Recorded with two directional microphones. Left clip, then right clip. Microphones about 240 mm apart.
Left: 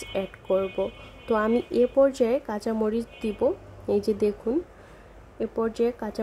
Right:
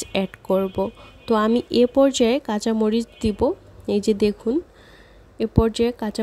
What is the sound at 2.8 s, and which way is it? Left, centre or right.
Speech, right.